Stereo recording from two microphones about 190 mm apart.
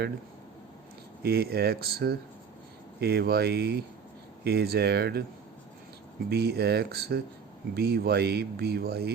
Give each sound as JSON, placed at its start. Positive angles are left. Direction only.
{"t": 1.2, "sound": "speech", "side_deg": -55}
{"t": 6.3, "sound": "speech", "side_deg": -60}